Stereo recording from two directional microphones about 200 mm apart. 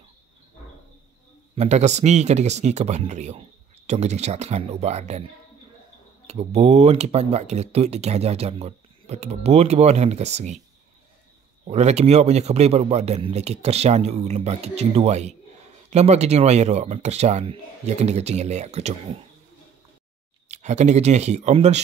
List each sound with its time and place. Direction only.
1.5 s speech: 35° right (ahead or behind)
6.2 s speech: 30° right (ahead or behind)
11.6 s speech: 35° right (ahead or behind)
20.4 s speech: 35° right (ahead or behind)